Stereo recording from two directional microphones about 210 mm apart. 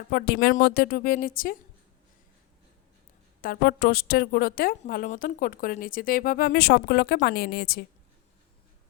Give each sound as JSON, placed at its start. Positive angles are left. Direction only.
{"t": 0.1, "sound": "a woman's voice", "side_deg": 50}
{"t": 3.4, "sound": "a woman's voice", "side_deg": 50}